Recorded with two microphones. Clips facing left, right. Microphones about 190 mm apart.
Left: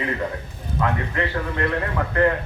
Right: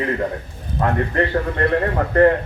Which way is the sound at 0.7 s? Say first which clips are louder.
Right 5 dB; 40° right (ahead or behind).